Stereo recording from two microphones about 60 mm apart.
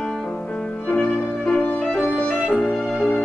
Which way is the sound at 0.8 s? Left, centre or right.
Left.